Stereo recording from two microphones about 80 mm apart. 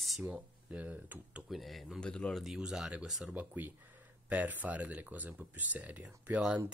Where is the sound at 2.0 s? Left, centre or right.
Centre.